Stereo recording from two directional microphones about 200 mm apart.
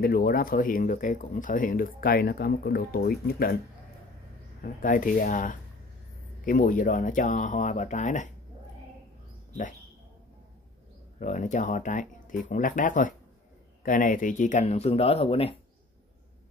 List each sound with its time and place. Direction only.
0.0 s speech: 50° left (ahead or behind)
4.6 s speech: 45° left (ahead or behind)
11.1 s speech: 40° left (ahead or behind)